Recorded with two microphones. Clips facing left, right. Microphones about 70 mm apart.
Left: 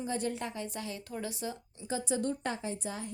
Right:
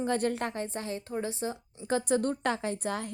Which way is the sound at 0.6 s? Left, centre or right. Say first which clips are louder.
Right 4 dB; right.